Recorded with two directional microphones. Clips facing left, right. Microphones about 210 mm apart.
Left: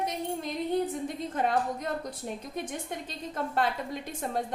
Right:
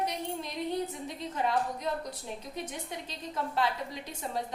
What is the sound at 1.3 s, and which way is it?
A woman's voice, 50° left (ahead or behind).